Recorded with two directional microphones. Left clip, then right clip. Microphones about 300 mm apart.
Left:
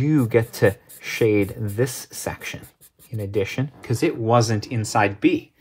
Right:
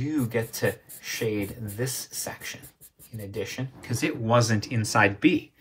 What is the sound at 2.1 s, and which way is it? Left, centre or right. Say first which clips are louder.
Beatboxing: left 5 dB; left.